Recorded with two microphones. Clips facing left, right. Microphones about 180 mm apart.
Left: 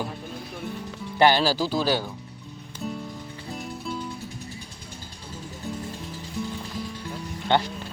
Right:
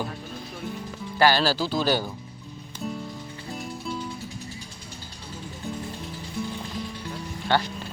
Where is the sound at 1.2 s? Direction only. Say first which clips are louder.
Left 1 dB; 15° left (ahead or behind).